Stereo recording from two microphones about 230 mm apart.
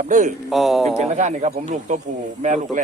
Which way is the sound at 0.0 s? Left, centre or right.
Right.